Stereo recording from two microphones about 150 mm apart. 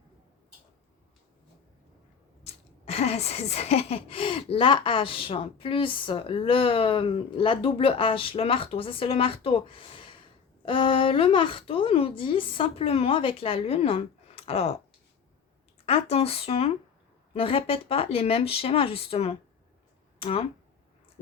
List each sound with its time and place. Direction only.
2.4 s speech: 45° left (ahead or behind)
15.9 s speech: 40° left (ahead or behind)